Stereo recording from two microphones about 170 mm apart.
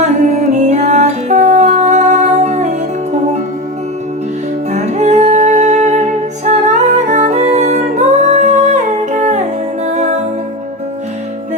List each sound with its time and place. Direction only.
0.0 s music: 45° right (ahead or behind)
4.7 s music: 40° right (ahead or behind)